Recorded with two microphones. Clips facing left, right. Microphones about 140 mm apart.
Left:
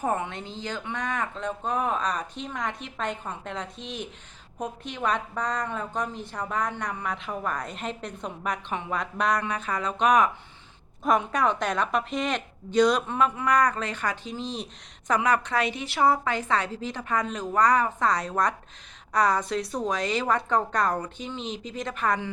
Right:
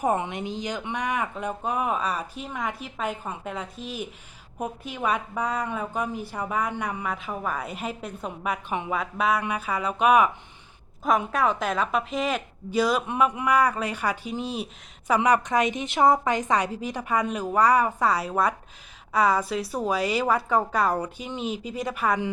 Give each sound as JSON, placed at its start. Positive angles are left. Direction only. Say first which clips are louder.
{"t": 0.0, "sound": "a woman's voice", "louder": "right 3 dB", "side_deg": -15}